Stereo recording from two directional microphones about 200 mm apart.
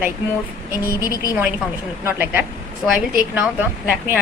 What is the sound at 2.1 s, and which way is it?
A woman's voice, 10° right (ahead or behind).